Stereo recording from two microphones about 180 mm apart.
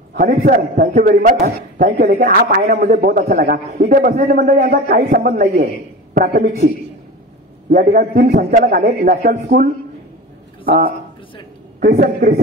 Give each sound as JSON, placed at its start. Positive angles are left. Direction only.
{"t": 0.1, "sound": "a man's voice", "side_deg": -50}
{"t": 7.7, "sound": "a man's voice", "side_deg": -50}